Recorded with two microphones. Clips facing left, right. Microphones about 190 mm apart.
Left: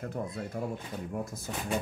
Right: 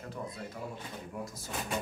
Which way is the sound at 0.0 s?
50° left (ahead or behind).